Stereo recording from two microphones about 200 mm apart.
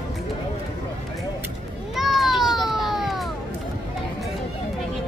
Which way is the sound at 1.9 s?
Centre (ahead or behind).